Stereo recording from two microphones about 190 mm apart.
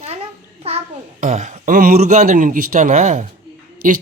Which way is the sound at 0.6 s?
30° right (ahead or behind).